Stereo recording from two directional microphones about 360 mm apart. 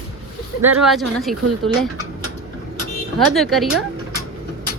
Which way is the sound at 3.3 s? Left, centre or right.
Centre.